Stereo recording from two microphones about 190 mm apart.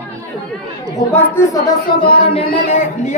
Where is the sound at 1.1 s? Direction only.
15° left (ahead or behind).